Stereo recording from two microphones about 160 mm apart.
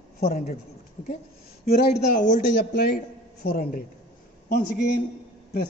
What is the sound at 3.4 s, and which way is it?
Speech, 70° left (ahead or behind).